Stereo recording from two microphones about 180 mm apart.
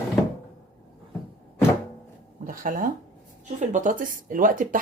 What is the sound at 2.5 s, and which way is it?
Speech, 50° right (ahead or behind).